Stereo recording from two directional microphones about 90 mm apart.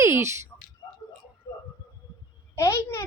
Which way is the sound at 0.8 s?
50° left (ahead or behind).